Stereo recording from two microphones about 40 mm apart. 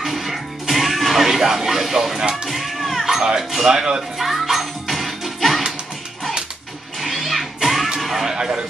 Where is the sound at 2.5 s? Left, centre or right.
Centre.